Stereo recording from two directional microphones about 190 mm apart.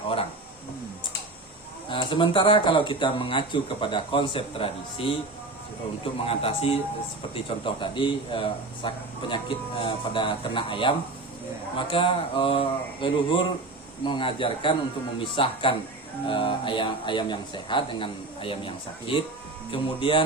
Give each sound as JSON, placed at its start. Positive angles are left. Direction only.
{"t": 1.9, "sound": "speech", "side_deg": 25}
{"t": 6.2, "sound": "speech", "side_deg": 30}